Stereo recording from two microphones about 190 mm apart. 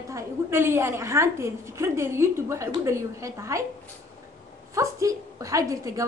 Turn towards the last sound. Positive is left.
turn(degrees=-15)  # may be behind; listen again after turning